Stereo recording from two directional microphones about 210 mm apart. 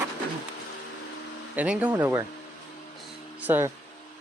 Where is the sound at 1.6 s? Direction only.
5° right (ahead or behind).